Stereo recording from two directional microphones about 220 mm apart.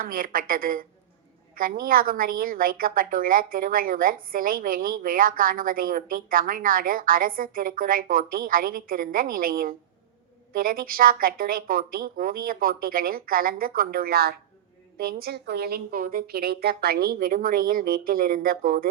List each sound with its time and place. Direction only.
0.0 s a woman's voice: 40° right (ahead or behind)